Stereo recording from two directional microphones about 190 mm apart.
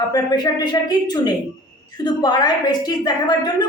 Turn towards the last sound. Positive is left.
turn(degrees=20)  # may be behind; listen again after turning